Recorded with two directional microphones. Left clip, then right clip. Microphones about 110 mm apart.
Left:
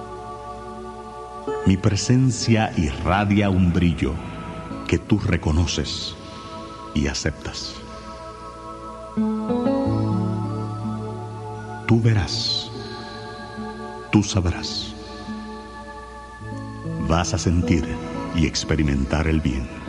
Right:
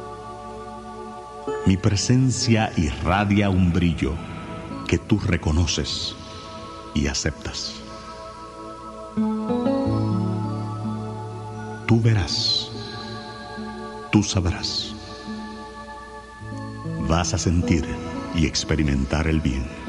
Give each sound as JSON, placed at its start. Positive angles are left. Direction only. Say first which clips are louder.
{"t": 1.4, "sound": "speech", "louder": "left 1 dB", "side_deg": -35}
{"t": 9.2, "sound": "music", "louder": "left 1 dB", "side_deg": -20}
{"t": 11.8, "sound": "music", "louder": "left 1 dB", "side_deg": -10}
{"t": 14.2, "sound": "speech", "louder": "even", "side_deg": -50}
{"t": 17.0, "sound": "speech", "louder": "left 1 dB", "side_deg": -20}
{"t": 18.3, "sound": "speech", "louder": "even", "side_deg": -40}